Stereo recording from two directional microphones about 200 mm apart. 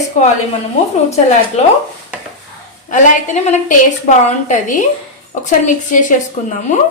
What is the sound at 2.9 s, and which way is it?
A woman's voice, 35° left (ahead or behind).